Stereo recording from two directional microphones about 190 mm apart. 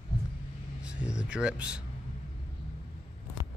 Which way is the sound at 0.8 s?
5° right (ahead or behind).